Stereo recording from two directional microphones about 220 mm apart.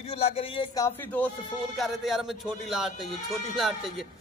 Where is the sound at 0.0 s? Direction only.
25° left (ahead or behind).